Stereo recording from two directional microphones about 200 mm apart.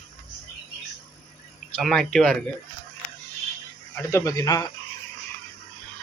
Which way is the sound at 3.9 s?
15° left (ahead or behind).